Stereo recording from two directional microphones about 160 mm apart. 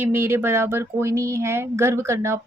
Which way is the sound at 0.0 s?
15° right (ahead or behind).